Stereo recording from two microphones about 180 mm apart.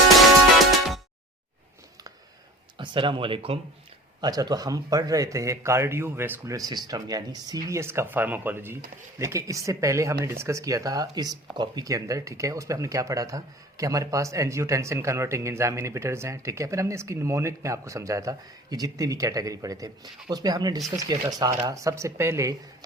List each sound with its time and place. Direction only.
0.6 s music: centre (ahead or behind)
2.7 s speech: 25° right (ahead or behind)